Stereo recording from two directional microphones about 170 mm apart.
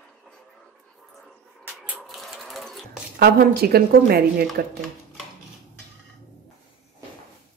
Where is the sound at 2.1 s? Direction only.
Centre (ahead or behind).